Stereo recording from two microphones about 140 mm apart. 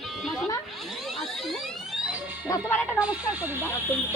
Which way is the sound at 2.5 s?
20° left (ahead or behind).